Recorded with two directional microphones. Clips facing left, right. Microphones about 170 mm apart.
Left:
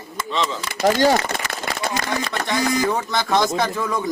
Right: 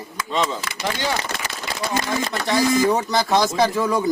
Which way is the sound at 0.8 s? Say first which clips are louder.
Left 9 dB; 45° left (ahead or behind).